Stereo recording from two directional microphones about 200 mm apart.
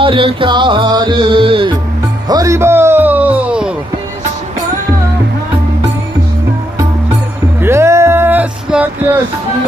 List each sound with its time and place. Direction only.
0.0 s music: 25° right (ahead or behind); by 3.7 s 5° right (ahead or behind)
7.6 s music: 15° right (ahead or behind)